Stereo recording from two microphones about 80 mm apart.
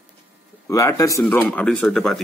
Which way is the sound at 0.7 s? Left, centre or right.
Left.